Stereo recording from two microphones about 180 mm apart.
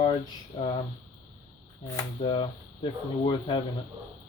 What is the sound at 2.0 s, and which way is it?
Speech, 25° left (ahead or behind).